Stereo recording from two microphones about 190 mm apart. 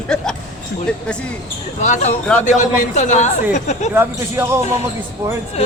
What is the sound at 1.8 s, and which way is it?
A man's voice, 35° left (ahead or behind).